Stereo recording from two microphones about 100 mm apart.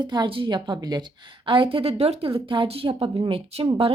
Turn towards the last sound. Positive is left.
turn(degrees=-70)  # may be behind; listen again after turning